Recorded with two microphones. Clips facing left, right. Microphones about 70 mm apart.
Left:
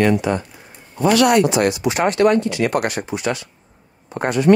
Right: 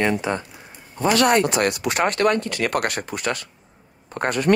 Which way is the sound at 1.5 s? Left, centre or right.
Right.